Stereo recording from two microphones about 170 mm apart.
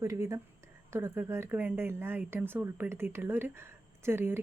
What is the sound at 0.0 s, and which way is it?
Speech, 15° right (ahead or behind).